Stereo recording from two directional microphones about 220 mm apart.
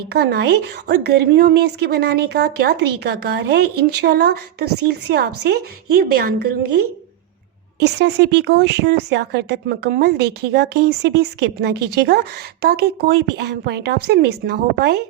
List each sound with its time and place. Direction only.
0.1 s speech: 45° right (ahead or behind)
7.8 s speech: 50° right (ahead or behind)